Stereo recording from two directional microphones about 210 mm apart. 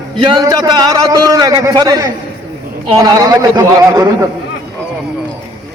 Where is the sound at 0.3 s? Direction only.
15° right (ahead or behind).